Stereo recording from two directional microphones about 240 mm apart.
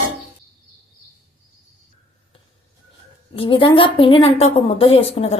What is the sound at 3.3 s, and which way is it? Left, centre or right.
A woman's voice, left.